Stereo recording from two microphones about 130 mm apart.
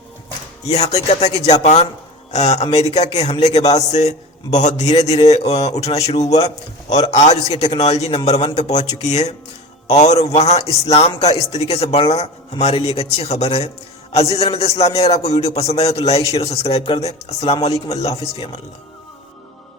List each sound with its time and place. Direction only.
0.6 s a man's voice: 60° left (ahead or behind)